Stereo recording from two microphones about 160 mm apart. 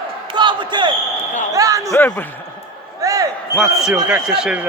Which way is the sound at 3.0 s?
20° right (ahead or behind).